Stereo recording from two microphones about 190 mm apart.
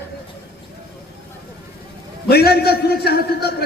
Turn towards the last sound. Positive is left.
turn(degrees=55)  # may be behind; listen again after turning